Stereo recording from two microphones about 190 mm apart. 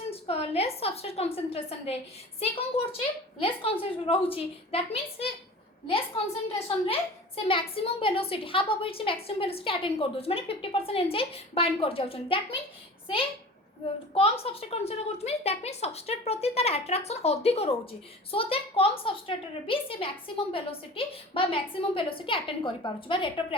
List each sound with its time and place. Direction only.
0.1 s a woman's voice: 30° left (ahead or behind)
6.7 s a woman's voice: 30° left (ahead or behind)
14.1 s a woman's voice: 30° left (ahead or behind)